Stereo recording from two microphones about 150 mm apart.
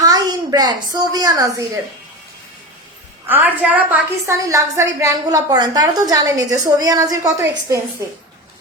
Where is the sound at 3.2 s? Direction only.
10° right (ahead or behind).